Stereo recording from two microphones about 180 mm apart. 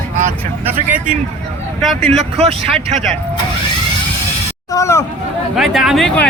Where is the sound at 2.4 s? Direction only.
35° right (ahead or behind).